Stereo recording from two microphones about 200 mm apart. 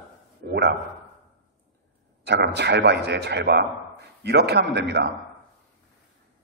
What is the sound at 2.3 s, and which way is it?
A man's voice, 55° right (ahead or behind).